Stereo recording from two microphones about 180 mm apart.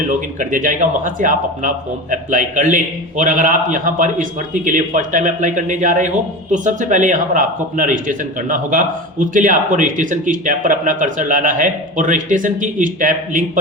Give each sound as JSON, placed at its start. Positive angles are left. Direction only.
{"t": 0.1, "sound": "speech", "side_deg": -45}